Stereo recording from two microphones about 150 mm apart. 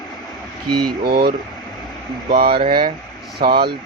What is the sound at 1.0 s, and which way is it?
Speech, 90° right.